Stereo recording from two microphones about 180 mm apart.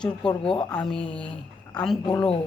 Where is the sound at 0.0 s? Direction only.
5° left (ahead or behind).